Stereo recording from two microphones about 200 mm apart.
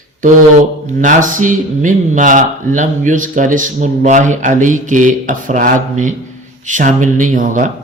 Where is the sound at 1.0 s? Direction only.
40° right (ahead or behind).